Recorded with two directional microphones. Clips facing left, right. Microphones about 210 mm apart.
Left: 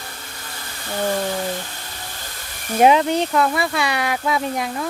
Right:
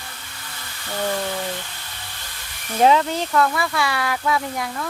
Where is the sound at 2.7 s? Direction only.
15° left (ahead or behind).